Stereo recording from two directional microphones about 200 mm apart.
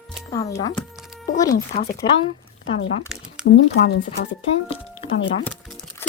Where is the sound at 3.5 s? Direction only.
55° left (ahead or behind).